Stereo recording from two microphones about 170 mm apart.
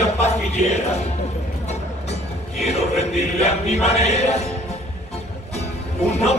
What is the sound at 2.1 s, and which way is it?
Music, 40° left (ahead or behind).